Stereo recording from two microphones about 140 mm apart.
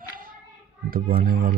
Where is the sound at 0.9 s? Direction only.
90° right.